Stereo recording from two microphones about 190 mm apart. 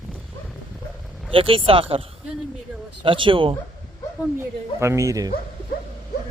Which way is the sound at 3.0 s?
25° right (ahead or behind).